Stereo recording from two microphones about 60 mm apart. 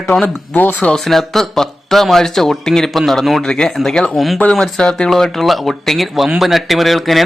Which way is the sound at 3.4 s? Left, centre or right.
Centre.